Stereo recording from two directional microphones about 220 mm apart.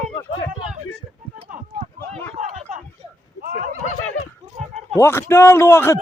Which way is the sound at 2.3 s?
30° right (ahead or behind).